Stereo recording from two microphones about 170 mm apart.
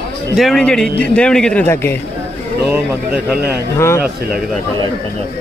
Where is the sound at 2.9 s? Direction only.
10° right (ahead or behind).